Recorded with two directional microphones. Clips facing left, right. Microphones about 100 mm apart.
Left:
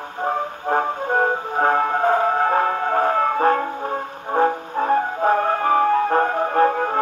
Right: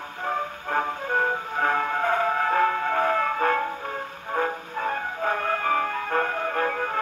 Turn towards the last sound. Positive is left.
turn(degrees=35)  # may be behind; listen again after turning